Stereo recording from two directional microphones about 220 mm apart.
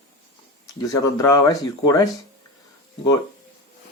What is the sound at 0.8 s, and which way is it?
Speech, 15° left (ahead or behind).